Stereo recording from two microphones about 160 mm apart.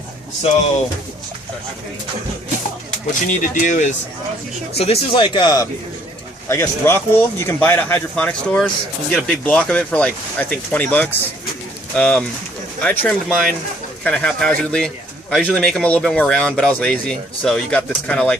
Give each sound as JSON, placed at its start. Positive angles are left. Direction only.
{"t": 3.2, "sound": "speech", "side_deg": 55}
{"t": 4.8, "sound": "speech", "side_deg": 35}
{"t": 6.5, "sound": "speech", "side_deg": 15}